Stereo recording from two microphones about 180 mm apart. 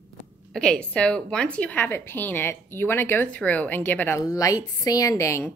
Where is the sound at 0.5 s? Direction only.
5° left (ahead or behind).